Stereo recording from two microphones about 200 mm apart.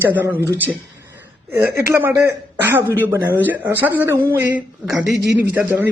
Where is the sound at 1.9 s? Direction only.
10° right (ahead or behind).